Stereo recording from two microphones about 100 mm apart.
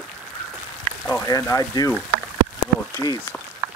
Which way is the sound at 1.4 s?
35° left (ahead or behind).